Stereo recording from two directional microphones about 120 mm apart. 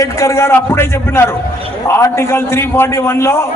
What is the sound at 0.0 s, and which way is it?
A man's voice, 25° left (ahead or behind).